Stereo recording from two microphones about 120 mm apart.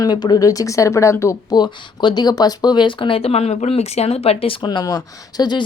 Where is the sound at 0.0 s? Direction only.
35° left (ahead or behind); by 4.5 s 55° left (ahead or behind).